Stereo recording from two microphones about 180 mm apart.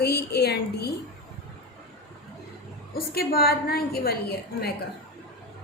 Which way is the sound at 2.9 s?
55° left (ahead or behind).